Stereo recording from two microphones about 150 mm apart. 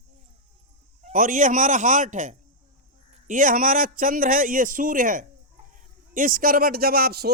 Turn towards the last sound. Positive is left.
turn(degrees=-90)